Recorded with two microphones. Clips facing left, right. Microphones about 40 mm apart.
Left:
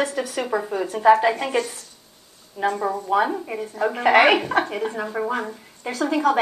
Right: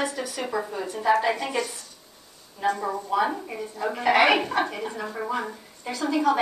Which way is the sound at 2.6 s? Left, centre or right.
Centre.